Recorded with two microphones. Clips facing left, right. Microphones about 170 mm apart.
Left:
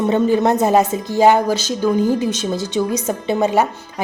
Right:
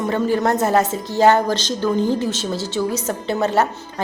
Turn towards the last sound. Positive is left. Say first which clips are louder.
# left 2 dB
turn(degrees=15)  # may be behind; listen again after turning